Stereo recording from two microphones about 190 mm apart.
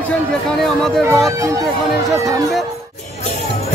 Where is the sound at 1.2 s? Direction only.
15° right (ahead or behind).